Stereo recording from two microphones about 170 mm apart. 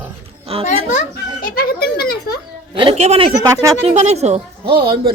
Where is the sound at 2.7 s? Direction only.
35° right (ahead or behind).